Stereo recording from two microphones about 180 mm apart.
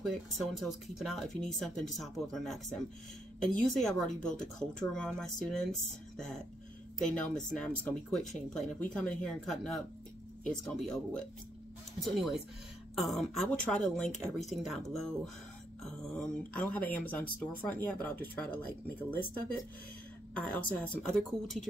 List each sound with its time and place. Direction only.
0.0 s speech: centre (ahead or behind)
7.1 s speech: 5° left (ahead or behind)
20.3 s speech: 5° left (ahead or behind)